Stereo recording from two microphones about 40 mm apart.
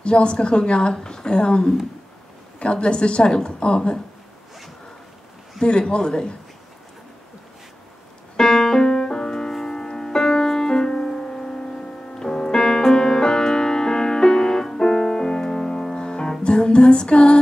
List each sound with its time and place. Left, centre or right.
0.0 s a woman's voice: left
5.6 s a woman's voice: left
8.4 s music: centre